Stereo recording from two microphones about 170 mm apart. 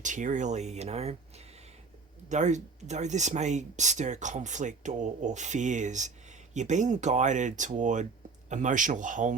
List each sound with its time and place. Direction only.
0.0 s speech: 45° right (ahead or behind)
2.3 s speech: 45° right (ahead or behind)